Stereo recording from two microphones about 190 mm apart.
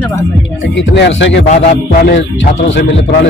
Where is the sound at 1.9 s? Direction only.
60° left (ahead or behind).